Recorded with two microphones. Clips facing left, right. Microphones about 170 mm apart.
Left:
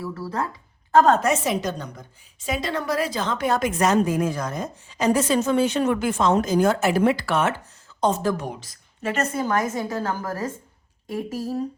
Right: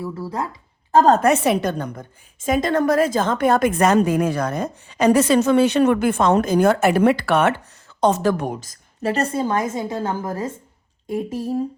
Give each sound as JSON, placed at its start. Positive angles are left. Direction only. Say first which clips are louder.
{"t": 0.0, "sound": "a woman's voice", "louder": "right 2 dB", "side_deg": -20}
{"t": 0.9, "sound": "a woman's voice", "louder": "right 2 dB", "side_deg": -30}
{"t": 1.2, "sound": "a woman's voice", "louder": "right 5 dB", "side_deg": -60}
{"t": 8.4, "sound": "a woman's voice", "louder": "right 5 dB", "side_deg": -45}